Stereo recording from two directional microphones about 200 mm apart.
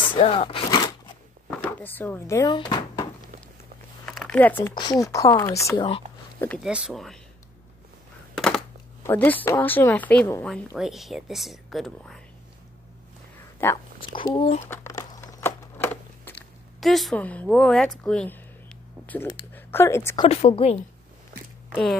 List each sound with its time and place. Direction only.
0.0 s speech: 25° left (ahead or behind)
1.5 s speech: 10° left (ahead or behind)
4.0 s a sound: 5° left (ahead or behind)
4.7 s speech: 20° left (ahead or behind)
6.6 s speech: 5° right (ahead or behind)
8.4 s a sound: centre (ahead or behind)
9.0 s speech: 10° left (ahead or behind)
14.3 s speech: 30° left (ahead or behind)
14.7 s crumpling: 15° left (ahead or behind)
16.8 s speech: centre (ahead or behind)
20.2 s a woman's voice: 30° left (ahead or behind)